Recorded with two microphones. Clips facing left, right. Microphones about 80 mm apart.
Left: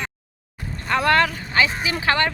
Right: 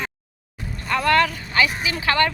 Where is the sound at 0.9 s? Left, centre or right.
Left.